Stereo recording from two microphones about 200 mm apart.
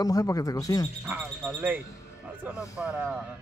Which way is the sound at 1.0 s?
10° right (ahead or behind).